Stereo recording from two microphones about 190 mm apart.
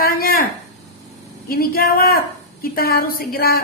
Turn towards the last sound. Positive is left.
turn(degrees=50)  # may be behind; listen again after turning